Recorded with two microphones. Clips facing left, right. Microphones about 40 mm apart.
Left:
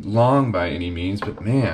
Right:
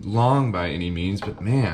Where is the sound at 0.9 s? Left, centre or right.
Left.